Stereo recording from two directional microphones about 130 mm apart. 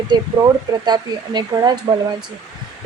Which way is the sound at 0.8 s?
35° right (ahead or behind).